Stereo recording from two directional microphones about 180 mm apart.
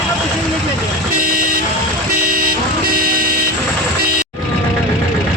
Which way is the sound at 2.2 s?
50° right (ahead or behind).